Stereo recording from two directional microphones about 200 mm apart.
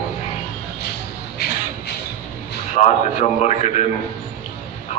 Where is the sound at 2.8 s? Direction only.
35° left (ahead or behind).